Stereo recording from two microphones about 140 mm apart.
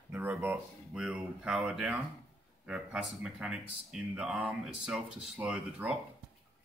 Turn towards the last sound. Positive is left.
turn(degrees=-5)  # may be behind; listen again after turning